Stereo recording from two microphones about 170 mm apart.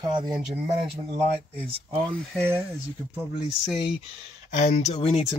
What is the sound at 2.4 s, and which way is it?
Speech, 15° right (ahead or behind).